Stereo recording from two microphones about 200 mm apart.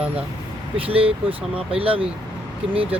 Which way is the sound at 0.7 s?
25° right (ahead or behind).